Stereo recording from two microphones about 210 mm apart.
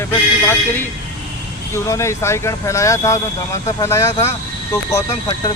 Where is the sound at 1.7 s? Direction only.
15° left (ahead or behind).